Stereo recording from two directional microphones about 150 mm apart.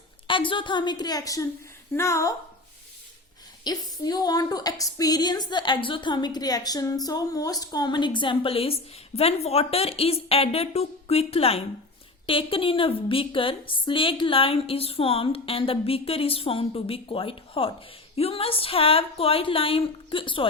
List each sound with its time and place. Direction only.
0.3 s a woman's voice: 35° left (ahead or behind); by 2.3 s 20° left (ahead or behind)
3.6 s a woman's voice: 25° left (ahead or behind)